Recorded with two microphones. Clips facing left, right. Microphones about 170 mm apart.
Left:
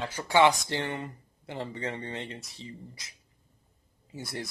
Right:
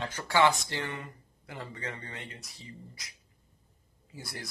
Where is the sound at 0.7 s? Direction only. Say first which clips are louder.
Left 4 dB; 30° left (ahead or behind).